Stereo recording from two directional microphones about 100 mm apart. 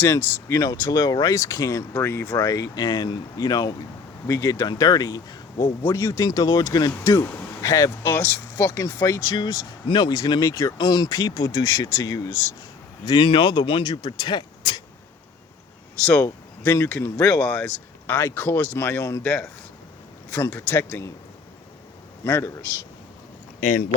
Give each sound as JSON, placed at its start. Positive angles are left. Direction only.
{"t": 0.4, "sound": "speech", "side_deg": 30}
{"t": 5.8, "sound": "speech", "side_deg": 30}
{"t": 7.0, "sound": "speech", "side_deg": 30}
{"t": 8.1, "sound": "speech", "side_deg": 20}
{"t": 9.0, "sound": "speech", "side_deg": 35}
{"t": 9.8, "sound": "speech", "side_deg": 50}
{"t": 10.8, "sound": "speech", "side_deg": 45}
{"t": 13.1, "sound": "speech", "side_deg": 55}
{"t": 16.2, "sound": "speech", "side_deg": 20}
{"t": 22.2, "sound": "speech", "side_deg": 25}